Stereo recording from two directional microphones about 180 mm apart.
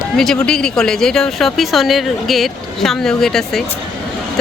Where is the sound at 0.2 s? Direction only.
5° left (ahead or behind).